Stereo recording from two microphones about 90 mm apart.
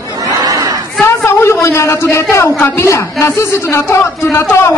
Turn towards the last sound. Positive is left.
turn(degrees=30)  # may be behind; listen again after turning